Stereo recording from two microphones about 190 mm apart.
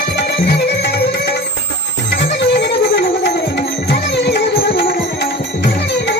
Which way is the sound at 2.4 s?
65° left (ahead or behind).